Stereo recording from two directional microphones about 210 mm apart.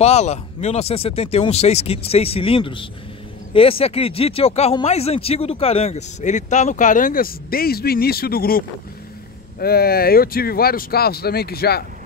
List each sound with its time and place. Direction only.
0.0 s speech: 30° left (ahead or behind); by 11.8 s 50° left (ahead or behind)